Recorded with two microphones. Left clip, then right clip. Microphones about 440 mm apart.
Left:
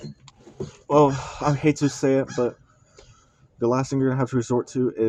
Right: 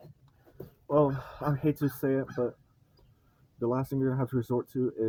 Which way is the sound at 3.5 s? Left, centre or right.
Right.